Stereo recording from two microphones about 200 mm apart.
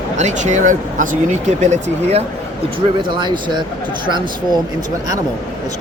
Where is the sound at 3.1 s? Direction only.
20° right (ahead or behind).